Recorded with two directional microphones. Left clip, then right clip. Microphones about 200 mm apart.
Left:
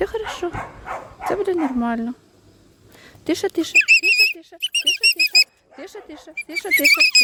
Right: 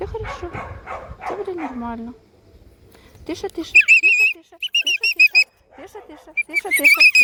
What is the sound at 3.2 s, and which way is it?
Speech, 50° left (ahead or behind).